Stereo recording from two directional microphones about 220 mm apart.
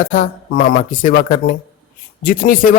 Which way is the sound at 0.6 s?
35° left (ahead or behind).